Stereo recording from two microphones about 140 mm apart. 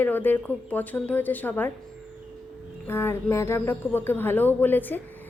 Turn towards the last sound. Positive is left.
turn(degrees=15)  # may be behind; listen again after turning